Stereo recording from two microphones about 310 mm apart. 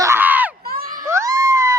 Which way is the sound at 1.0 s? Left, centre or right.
Centre.